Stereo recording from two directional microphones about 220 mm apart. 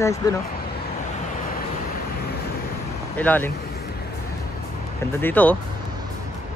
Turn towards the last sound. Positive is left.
turn(degrees=10)  # may be behind; listen again after turning